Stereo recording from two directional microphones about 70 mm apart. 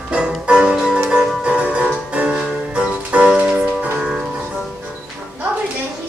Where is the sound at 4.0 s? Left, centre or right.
Centre.